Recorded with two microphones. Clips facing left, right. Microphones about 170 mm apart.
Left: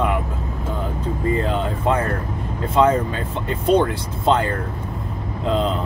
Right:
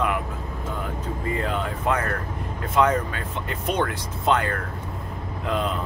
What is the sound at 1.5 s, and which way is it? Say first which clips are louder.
Speech: left 4 dB; 25° left (ahead or behind).